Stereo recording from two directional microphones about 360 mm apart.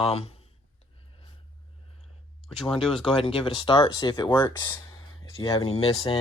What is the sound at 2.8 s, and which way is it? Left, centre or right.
Speech, centre.